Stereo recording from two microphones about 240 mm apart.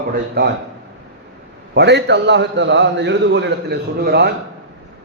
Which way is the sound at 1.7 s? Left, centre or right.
Right.